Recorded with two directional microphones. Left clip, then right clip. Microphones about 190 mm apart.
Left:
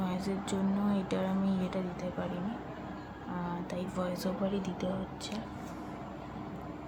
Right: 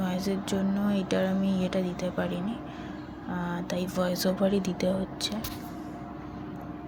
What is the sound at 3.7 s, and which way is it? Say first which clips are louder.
Speech: right 8 dB; 15° right (ahead or behind).